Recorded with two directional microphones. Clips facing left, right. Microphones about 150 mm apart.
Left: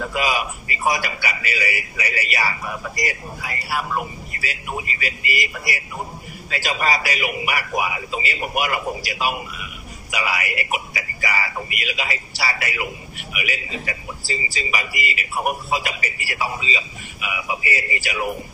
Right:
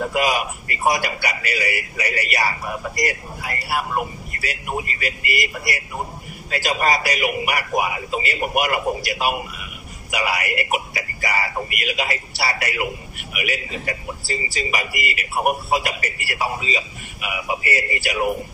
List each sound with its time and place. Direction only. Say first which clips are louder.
0.1 s a man's voice: right 2 dB; 50° right (ahead or behind)